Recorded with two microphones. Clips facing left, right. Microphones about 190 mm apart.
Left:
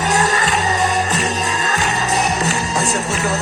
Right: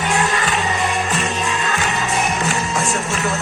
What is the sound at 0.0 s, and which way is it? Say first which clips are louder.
Music: left 2 dB; 40° left (ahead or behind).